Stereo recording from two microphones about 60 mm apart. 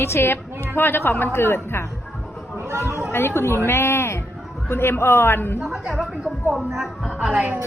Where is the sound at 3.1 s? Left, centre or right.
Left.